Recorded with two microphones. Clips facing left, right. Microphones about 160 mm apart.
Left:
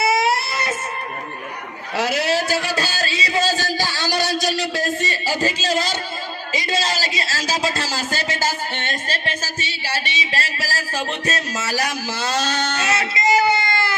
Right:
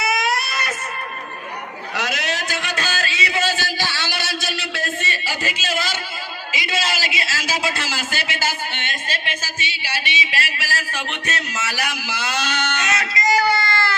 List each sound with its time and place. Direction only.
0.0 s baby cry: 30° left (ahead or behind)
2.0 s a sound: 30° left (ahead or behind)
6.5 s a man's voice: 35° left (ahead or behind); by 13.9 s 20° left (ahead or behind)